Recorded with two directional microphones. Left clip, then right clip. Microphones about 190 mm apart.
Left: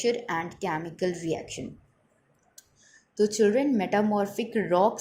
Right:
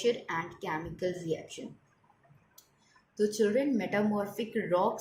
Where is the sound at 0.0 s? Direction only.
30° left (ahead or behind).